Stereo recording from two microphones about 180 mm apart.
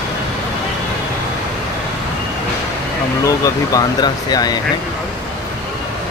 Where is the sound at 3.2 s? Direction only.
20° left (ahead or behind).